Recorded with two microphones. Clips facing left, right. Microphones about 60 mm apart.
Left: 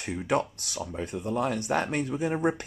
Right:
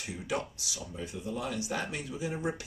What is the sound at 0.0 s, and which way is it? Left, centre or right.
Speech, left.